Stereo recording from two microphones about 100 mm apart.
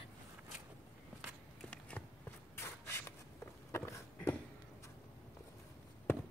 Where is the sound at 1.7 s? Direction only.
10° left (ahead or behind).